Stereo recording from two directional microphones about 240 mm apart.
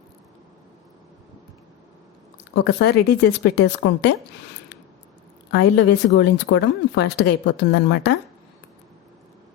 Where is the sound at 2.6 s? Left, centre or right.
Left.